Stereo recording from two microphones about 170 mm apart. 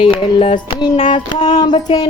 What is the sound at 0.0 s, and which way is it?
Speech, 30° left (ahead or behind).